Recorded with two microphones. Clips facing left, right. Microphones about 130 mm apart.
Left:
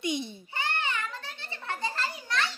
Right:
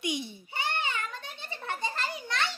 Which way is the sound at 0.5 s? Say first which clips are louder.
Even; 15° right (ahead or behind).